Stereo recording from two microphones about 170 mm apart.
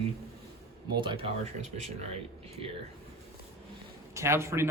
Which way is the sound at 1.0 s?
30° right (ahead or behind).